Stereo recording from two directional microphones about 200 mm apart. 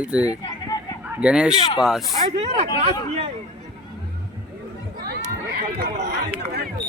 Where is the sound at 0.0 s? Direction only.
5° right (ahead or behind).